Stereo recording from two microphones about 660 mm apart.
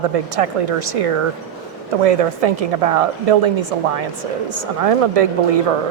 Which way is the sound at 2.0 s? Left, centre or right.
Right.